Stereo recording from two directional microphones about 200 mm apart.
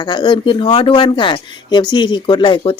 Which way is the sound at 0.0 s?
20° left (ahead or behind).